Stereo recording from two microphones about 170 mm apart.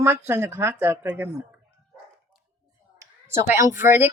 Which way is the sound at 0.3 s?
15° right (ahead or behind).